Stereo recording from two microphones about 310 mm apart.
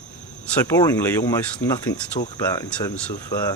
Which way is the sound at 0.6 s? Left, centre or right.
Centre.